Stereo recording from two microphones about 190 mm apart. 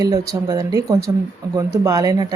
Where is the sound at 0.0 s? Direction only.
20° right (ahead or behind).